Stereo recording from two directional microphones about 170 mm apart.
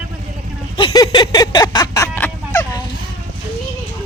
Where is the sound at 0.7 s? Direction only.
25° left (ahead or behind).